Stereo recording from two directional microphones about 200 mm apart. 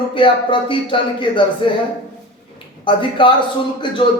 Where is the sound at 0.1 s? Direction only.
25° left (ahead or behind).